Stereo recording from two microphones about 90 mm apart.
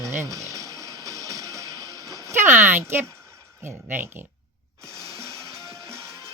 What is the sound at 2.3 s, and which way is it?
Speech, 25° right (ahead or behind).